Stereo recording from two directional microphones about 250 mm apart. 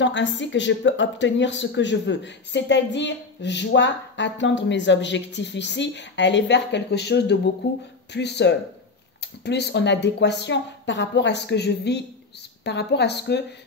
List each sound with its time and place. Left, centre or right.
0.0 s speech: left